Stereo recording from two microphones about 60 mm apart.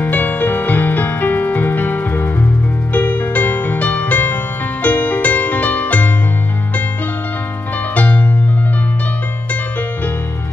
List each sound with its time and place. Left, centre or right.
0.0 s music: left
7.9 s music: left